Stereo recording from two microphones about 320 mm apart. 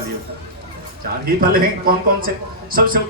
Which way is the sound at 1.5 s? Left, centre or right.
Right.